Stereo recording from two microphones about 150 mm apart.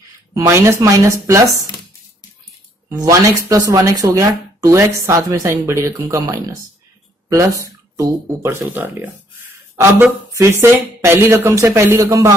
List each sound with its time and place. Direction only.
0.3 s speech: 20° right (ahead or behind)
2.9 s speech: 20° right (ahead or behind)